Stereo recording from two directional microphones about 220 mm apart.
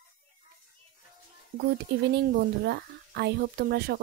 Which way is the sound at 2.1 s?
50° right (ahead or behind).